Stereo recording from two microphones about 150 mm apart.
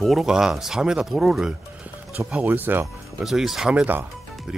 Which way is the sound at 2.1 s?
10° right (ahead or behind).